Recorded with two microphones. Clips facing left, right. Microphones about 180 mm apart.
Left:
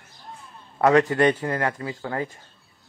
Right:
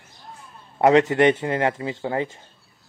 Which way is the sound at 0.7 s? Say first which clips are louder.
Right 2 dB; 20° right (ahead or behind).